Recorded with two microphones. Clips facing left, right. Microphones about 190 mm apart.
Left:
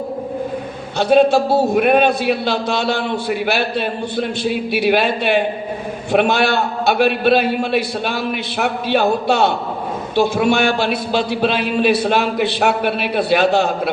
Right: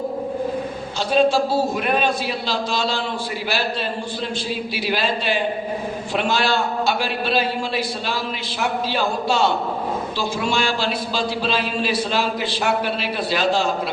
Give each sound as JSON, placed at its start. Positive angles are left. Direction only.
{"t": 0.9, "sound": "a man's voice", "side_deg": 60}